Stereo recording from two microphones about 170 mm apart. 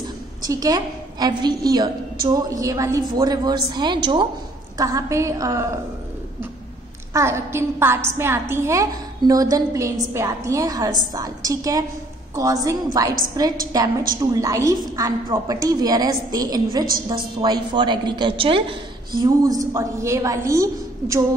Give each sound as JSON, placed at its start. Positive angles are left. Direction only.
{"t": 0.5, "sound": "a woman's voice", "side_deg": -20}
{"t": 7.2, "sound": "a woman's voice", "side_deg": -15}